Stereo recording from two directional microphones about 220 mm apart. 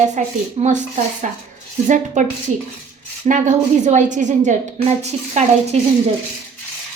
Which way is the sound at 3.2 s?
30° right (ahead or behind).